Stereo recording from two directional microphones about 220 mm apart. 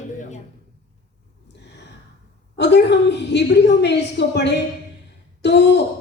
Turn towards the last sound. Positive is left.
turn(degrees=50)  # may be behind; listen again after turning